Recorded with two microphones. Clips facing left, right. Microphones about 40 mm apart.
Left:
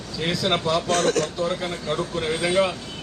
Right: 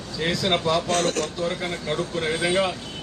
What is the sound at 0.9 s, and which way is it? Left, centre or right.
Speech, left.